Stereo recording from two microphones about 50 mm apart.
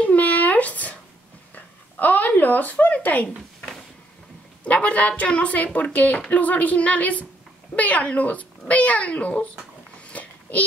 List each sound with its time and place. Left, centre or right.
0.0 s a sound: left
4.6 s a woman's voice: left
10.0 s babbling: left